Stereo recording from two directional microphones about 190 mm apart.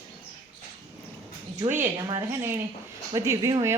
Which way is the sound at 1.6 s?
15° right (ahead or behind).